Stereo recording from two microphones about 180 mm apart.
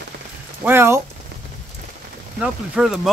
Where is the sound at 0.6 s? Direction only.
15° right (ahead or behind).